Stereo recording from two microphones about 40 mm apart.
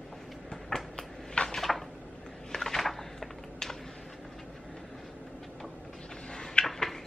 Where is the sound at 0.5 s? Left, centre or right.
Centre.